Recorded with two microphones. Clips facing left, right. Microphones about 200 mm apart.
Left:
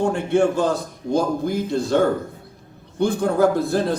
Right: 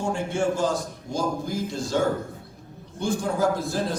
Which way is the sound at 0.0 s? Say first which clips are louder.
Left 7 dB; 60° left (ahead or behind).